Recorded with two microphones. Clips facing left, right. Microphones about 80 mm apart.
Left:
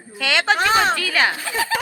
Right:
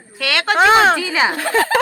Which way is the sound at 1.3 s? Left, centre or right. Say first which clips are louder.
Right 6 dB; right.